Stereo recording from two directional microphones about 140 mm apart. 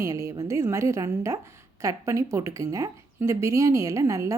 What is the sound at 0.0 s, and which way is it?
A woman's voice, 20° right (ahead or behind).